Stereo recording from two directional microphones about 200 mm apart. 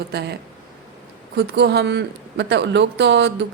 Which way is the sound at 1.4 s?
55° right (ahead or behind).